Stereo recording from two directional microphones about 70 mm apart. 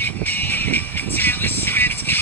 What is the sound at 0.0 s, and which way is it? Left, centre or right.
Music, left.